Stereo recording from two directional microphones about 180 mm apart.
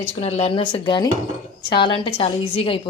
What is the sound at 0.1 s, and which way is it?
A woman's voice, 35° left (ahead or behind).